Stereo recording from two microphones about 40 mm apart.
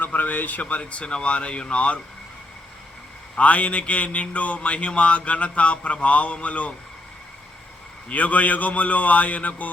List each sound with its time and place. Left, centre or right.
0.0 s speech: left
3.3 s speech: left
8.1 s speech: left